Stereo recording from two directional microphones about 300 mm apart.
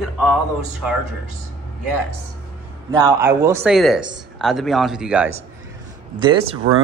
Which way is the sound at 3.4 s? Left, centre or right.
Centre.